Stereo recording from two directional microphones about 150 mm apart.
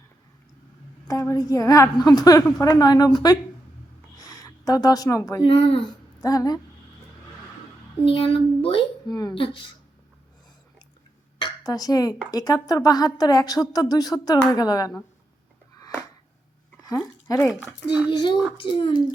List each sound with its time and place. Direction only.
1.0 s a woman's voice: 20° left (ahead or behind)
4.2 s a sound: 25° left (ahead or behind)
5.4 s speech: 35° left (ahead or behind)
8.0 s speech: 40° left (ahead or behind)
11.3 s a sound: 30° left (ahead or behind)
12.3 s a woman's voice: 25° left (ahead or behind)
16.9 s speech: 20° left (ahead or behind)
17.5 s a child's voice: 5° right (ahead or behind)
18.1 s speech: 30° left (ahead or behind)